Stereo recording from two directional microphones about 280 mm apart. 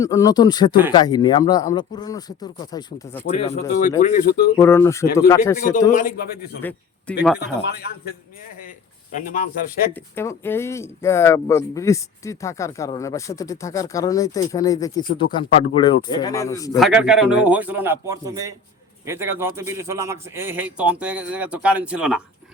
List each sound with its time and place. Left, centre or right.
0.0 s speech: centre
3.3 s speech: left
4.5 s speech: centre
5.5 s speech: left
6.6 s a man's voice: centre
7.3 s speech: left
9.1 s speech: left
9.9 s speech: centre
16.7 s a man's voice: centre